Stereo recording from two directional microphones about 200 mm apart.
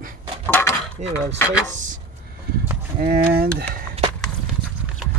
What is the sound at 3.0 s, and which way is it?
Speech, 50° right (ahead or behind).